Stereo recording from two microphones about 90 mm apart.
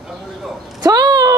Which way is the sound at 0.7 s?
45° right (ahead or behind).